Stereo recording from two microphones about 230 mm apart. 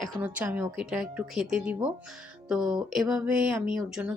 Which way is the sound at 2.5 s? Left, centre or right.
Centre.